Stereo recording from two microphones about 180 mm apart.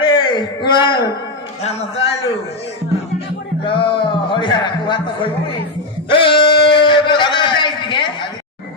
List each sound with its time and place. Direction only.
0.0 s a man's voice: 25° left (ahead or behind)
3.6 s a man's voice: 30° left (ahead or behind)
6.1 s a sound: 30° left (ahead or behind)